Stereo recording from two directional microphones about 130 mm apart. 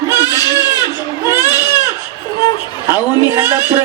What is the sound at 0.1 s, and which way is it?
Baby cry, 25° left (ahead or behind).